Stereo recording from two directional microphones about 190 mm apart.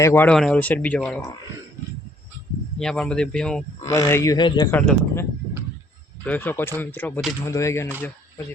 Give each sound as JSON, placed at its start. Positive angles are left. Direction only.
{"t": 0.0, "sound": "speech", "side_deg": 10}
{"t": 2.7, "sound": "speech", "side_deg": 5}
{"t": 3.8, "sound": "speech", "side_deg": 20}
{"t": 4.7, "sound": "speech", "side_deg": 10}
{"t": 6.2, "sound": "speech", "side_deg": 10}